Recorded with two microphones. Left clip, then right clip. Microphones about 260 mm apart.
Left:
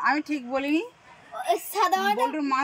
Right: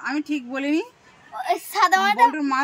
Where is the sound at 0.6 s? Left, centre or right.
Centre.